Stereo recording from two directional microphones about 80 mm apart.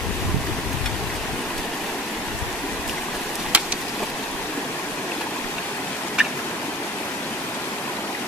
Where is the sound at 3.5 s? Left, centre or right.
Centre.